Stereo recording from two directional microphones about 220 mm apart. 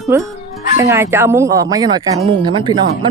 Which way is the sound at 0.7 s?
10° right (ahead or behind).